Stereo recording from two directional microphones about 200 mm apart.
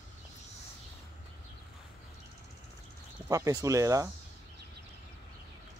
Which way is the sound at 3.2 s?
15° right (ahead or behind).